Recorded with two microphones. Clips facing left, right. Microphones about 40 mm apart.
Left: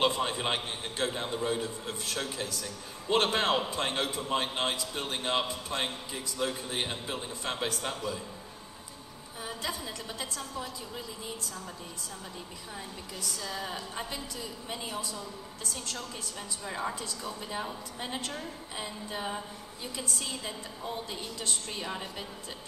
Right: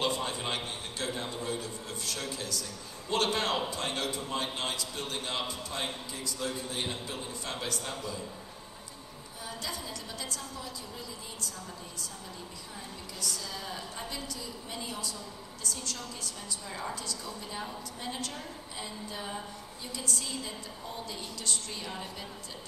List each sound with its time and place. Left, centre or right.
0.0 s a woman's voice: left
9.4 s a woman's voice: left
13.2 s a woman's voice: left